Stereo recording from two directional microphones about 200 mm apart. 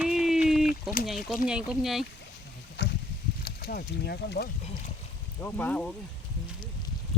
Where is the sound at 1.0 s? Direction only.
Centre (ahead or behind).